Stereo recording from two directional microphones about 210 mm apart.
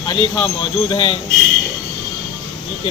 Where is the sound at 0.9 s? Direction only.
20° left (ahead or behind).